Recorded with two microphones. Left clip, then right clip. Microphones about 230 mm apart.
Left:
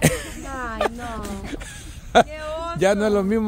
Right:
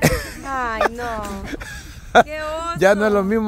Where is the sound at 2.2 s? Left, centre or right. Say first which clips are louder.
Right 4 dB; right.